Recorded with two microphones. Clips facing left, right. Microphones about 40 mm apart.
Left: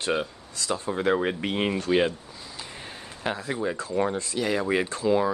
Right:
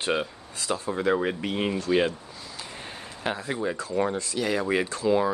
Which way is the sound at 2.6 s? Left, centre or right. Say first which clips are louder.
Right 1 dB; centre.